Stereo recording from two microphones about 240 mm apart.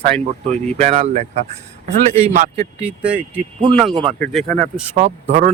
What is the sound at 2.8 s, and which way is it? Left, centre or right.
Speech, centre.